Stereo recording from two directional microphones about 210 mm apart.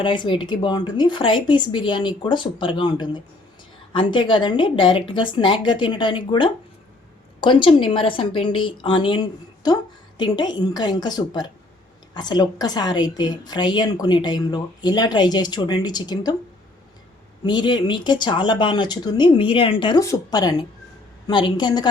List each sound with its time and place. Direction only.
0.0 s a woman's voice: 20° left (ahead or behind)
17.4 s a woman's voice: 20° left (ahead or behind)